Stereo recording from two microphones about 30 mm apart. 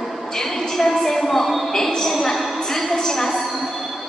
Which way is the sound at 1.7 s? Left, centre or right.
Centre.